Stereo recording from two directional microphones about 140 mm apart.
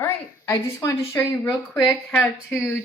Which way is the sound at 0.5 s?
20° left (ahead or behind).